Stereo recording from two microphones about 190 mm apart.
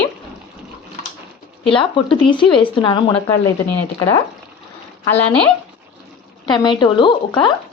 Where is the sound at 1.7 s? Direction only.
25° left (ahead or behind).